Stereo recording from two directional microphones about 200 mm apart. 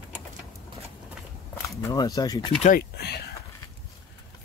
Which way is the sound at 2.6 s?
50° left (ahead or behind).